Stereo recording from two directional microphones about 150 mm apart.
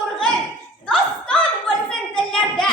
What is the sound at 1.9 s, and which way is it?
Hands, 5° left (ahead or behind).